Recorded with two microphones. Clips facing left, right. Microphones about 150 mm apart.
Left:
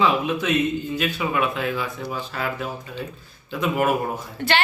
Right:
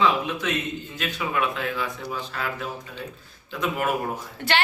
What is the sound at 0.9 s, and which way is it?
A man's voice, 5° left (ahead or behind).